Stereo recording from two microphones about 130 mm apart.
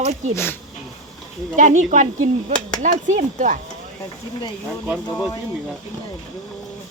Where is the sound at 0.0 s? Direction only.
55° right (ahead or behind).